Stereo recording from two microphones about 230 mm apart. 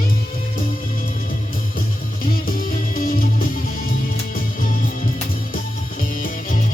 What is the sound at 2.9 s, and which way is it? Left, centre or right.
Music, left.